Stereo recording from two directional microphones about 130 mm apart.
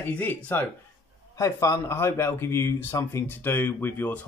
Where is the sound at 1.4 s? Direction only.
25° left (ahead or behind).